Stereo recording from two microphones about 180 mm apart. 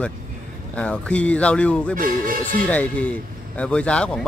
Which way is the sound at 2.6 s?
10° left (ahead or behind).